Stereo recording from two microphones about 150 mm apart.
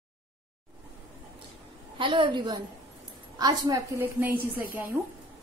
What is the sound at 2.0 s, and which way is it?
A woman's voice, 35° right (ahead or behind).